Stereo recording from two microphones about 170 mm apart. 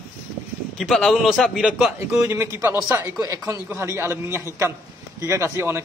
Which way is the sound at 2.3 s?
15° right (ahead or behind).